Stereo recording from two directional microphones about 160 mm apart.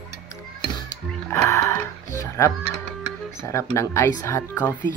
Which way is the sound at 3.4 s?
20° left (ahead or behind).